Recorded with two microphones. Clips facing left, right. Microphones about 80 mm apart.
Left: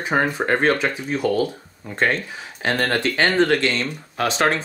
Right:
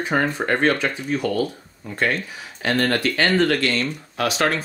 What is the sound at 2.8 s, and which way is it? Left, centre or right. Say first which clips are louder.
Speech: even; left.